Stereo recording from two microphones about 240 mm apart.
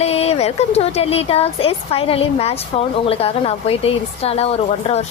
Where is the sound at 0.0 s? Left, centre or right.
Left.